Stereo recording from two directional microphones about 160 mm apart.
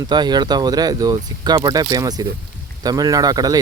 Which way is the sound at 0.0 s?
25° right (ahead or behind).